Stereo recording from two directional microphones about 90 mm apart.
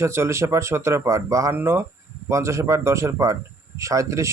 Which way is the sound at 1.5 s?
25° right (ahead or behind).